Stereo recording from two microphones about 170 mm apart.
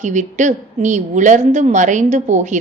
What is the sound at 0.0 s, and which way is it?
A woman's voice, 45° right (ahead or behind).